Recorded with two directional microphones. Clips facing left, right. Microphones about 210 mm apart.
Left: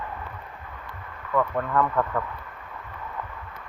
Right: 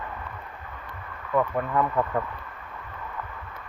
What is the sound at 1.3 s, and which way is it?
Speech, 10° right (ahead or behind).